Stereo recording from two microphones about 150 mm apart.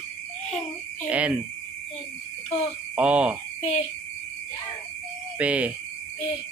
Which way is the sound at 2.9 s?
10° right (ahead or behind).